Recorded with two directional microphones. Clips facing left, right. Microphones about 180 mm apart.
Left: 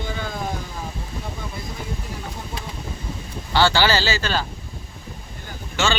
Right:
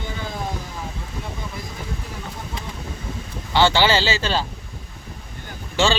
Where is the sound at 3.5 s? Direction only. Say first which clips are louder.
Right 1 dB; 20° right (ahead or behind).